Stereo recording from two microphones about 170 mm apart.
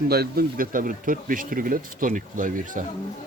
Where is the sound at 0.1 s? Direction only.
65° right (ahead or behind).